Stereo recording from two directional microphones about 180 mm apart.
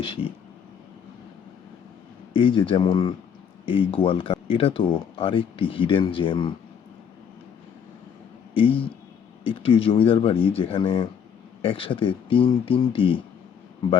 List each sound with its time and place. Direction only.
0.0 s speech: 30° left (ahead or behind)
2.3 s speech: 30° left (ahead or behind)
8.5 s speech: 30° left (ahead or behind)